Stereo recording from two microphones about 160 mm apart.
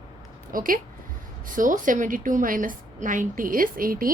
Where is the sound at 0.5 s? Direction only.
60° right (ahead or behind).